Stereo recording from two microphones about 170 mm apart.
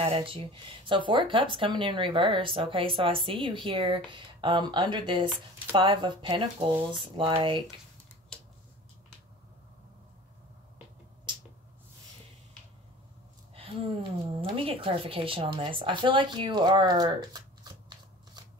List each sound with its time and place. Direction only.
0.0 s speech: 35° right (ahead or behind)
8.3 s scissors: 5° left (ahead or behind)
13.6 s speech: 30° right (ahead or behind)